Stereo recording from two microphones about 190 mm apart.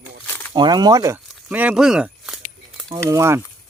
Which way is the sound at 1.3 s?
10° right (ahead or behind).